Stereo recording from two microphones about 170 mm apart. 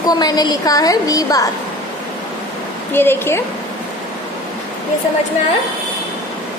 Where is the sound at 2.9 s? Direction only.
15° left (ahead or behind).